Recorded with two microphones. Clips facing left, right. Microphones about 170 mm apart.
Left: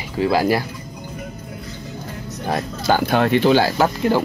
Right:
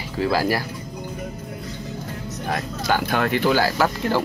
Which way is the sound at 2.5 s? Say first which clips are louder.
Left 4 dB; 30° left (ahead or behind).